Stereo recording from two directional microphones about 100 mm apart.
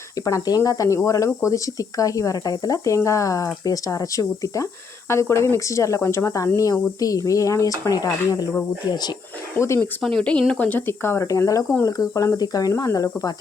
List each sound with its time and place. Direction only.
0.3 s speech: 35° left (ahead or behind)
9.6 s speech: 25° left (ahead or behind)
10.0 s speech: 5° left (ahead or behind); by 13.3 s 35° left (ahead or behind)